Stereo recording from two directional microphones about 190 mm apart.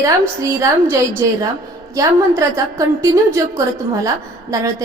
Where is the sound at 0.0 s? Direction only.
15° right (ahead or behind).